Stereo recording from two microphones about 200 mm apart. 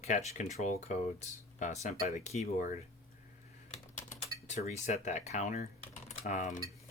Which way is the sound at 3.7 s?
35° left (ahead or behind).